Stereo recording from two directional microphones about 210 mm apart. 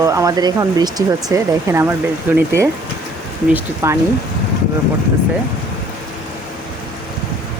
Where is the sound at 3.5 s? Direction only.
15° right (ahead or behind).